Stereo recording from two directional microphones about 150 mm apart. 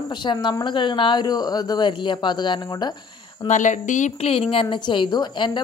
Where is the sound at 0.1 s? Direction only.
30° left (ahead or behind).